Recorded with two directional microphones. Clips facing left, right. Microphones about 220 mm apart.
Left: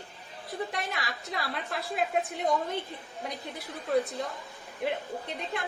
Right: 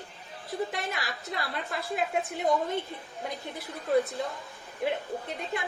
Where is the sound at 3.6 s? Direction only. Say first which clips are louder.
Right 2 dB; centre (ahead or behind).